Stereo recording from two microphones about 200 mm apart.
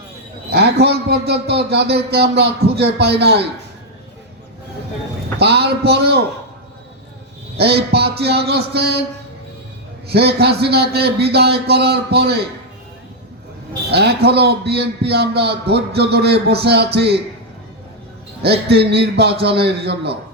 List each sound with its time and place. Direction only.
0.5 s a man's voice: 55° right (ahead or behind)
5.4 s a man's voice: 55° right (ahead or behind)
7.6 s a man's voice: 55° right (ahead or behind)
10.1 s a man's voice: 55° right (ahead or behind)
13.9 s a man's voice: 55° right (ahead or behind)
18.4 s a man's voice: 55° right (ahead or behind)